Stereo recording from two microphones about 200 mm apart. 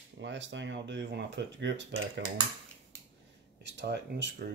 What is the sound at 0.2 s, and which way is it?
Speech, 65° right (ahead or behind).